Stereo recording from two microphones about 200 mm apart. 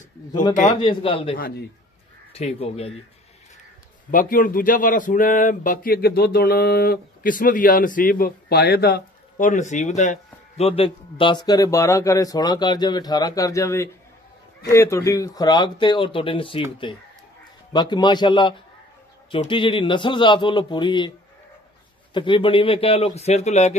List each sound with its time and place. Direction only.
0.3 s a man's voice: 20° left (ahead or behind)
4.1 s a man's voice: 45° left (ahead or behind); by 21.1 s 20° left (ahead or behind)
22.1 s a man's voice: 25° left (ahead or behind)